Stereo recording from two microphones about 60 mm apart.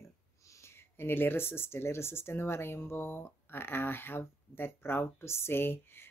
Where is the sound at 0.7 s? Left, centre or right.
Left.